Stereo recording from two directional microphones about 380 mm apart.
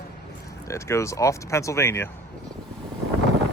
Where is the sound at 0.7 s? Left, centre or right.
Centre.